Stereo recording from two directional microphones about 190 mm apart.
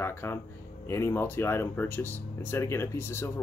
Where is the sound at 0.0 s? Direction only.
15° left (ahead or behind).